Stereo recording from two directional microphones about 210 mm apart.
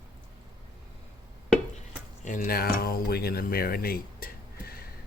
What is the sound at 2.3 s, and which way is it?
Speech, 40° left (ahead or behind).